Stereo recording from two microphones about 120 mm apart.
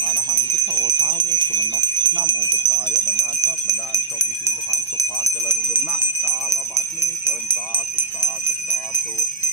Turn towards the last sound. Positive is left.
turn(degrees=-20)  # may be behind; listen again after turning